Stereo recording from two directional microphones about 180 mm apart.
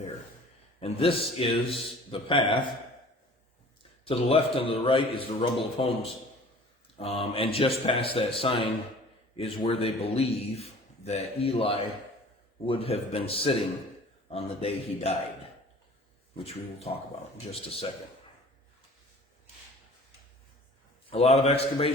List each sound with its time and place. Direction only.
0.8 s a man's voice: 30° left (ahead or behind)
4.0 s a man's voice: 30° left (ahead or behind)
16.4 s a man's voice: 35° left (ahead or behind)
21.1 s a man's voice: 35° left (ahead or behind)